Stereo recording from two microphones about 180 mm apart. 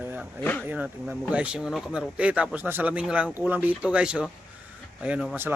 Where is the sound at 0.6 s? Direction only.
10° right (ahead or behind).